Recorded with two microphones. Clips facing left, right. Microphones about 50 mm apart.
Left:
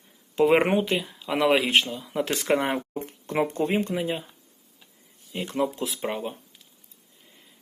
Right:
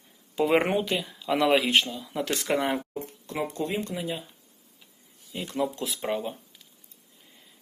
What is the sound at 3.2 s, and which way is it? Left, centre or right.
Speech, left.